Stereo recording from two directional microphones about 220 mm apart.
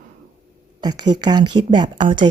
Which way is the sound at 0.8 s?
20° right (ahead or behind).